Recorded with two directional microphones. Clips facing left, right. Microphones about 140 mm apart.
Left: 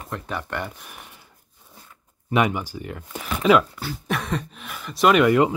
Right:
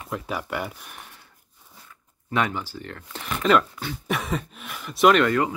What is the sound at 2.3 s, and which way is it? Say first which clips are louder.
Speech: left 4 dB; 15° left (ahead or behind).